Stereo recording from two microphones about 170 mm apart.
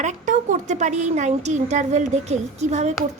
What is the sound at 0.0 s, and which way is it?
A woman's voice, 45° right (ahead or behind).